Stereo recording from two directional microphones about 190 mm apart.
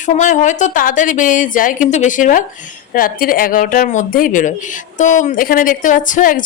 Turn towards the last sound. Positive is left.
turn(degrees=45)  # may be behind; listen again after turning